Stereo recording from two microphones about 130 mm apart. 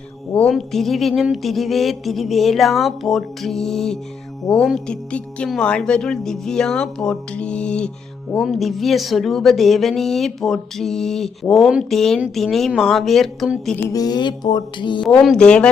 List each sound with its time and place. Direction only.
0.3 s speech: 5° left (ahead or behind)
13.9 s music: 30° left (ahead or behind)
15.0 s speech: centre (ahead or behind)